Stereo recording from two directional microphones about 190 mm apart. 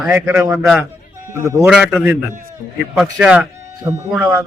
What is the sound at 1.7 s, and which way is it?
A man's voice, centre (ahead or behind).